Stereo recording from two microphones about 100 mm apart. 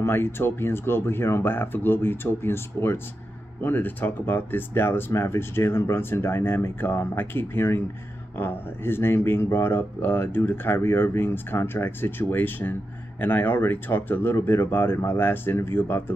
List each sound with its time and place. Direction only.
0.0 s speech: 25° left (ahead or behind)